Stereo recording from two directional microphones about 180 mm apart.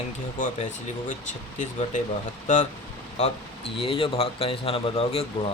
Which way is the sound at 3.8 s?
30° left (ahead or behind).